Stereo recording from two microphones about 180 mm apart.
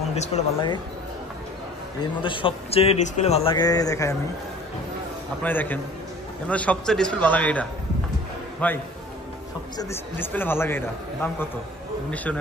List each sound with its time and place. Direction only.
0.1 s speech: 40° left (ahead or behind)
2.2 s a man's voice: 30° left (ahead or behind)
5.4 s a man's voice: 10° left (ahead or behind)